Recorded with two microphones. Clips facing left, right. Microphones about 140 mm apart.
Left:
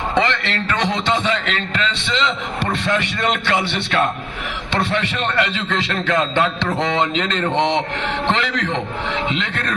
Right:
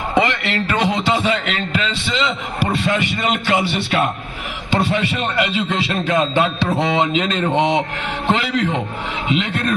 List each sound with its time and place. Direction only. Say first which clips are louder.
0.1 s a man's voice: right 3 dB; 10° right (ahead or behind)